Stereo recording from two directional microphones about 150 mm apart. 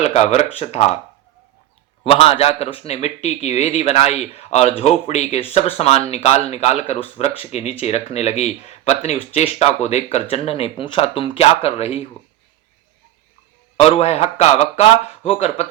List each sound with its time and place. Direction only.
0.0 s speech: 45° left (ahead or behind)
2.0 s speech: 40° left (ahead or behind)
13.7 s speech: 45° left (ahead or behind)